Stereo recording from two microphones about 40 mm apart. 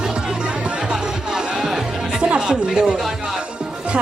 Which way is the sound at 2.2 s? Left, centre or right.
Right.